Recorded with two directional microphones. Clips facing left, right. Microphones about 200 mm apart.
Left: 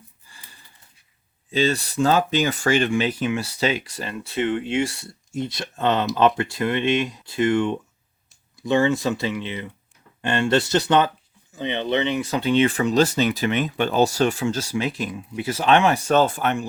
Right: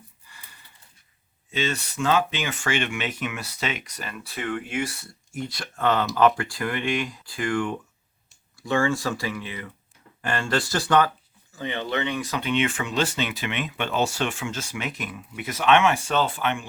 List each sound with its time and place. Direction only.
1.5 s speech: 35° left (ahead or behind)